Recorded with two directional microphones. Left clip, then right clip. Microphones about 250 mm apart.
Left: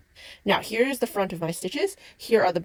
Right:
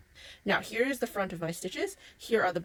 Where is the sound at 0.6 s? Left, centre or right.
Left.